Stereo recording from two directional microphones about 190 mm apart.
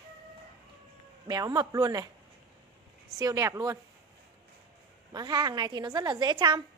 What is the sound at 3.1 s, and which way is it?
Speech, 20° right (ahead or behind).